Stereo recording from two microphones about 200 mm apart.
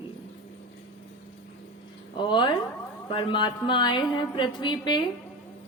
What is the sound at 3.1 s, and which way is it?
Speech, 25° left (ahead or behind).